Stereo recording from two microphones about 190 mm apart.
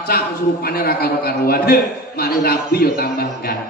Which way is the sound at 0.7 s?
55° left (ahead or behind).